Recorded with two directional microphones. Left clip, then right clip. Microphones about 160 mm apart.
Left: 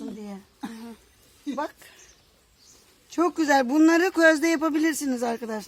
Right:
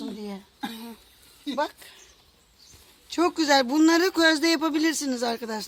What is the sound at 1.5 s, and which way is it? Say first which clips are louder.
Speech: right 4 dB; 30° left (ahead or behind).